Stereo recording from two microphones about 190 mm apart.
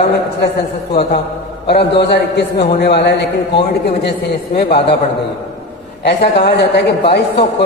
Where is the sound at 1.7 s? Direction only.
60° left (ahead or behind).